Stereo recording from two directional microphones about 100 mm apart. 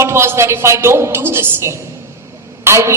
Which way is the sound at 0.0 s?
25° right (ahead or behind).